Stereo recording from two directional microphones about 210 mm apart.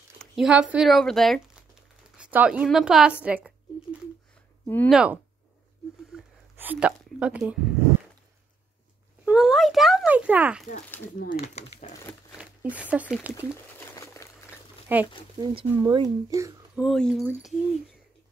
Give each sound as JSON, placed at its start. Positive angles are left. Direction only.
{"t": 0.2, "sound": "speech", "side_deg": -5}
{"t": 4.6, "sound": "speech", "side_deg": 10}
{"t": 4.9, "sound": "speech", "side_deg": -5}
{"t": 6.1, "sound": "a sound", "side_deg": -10}
{"t": 9.2, "sound": "speech", "side_deg": -5}
{"t": 11.1, "sound": "speech", "side_deg": 35}
{"t": 12.4, "sound": "speech", "side_deg": -5}
{"t": 13.7, "sound": "crumpling", "side_deg": 15}
{"t": 14.9, "sound": "speech", "side_deg": -10}
{"t": 15.3, "sound": "speech", "side_deg": -20}
{"t": 16.8, "sound": "speech", "side_deg": 0}